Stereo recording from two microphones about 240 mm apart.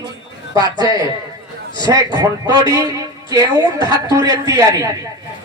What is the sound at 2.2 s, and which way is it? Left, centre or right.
A man's voice, centre.